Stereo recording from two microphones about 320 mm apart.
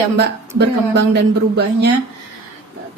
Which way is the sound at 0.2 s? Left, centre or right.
Right.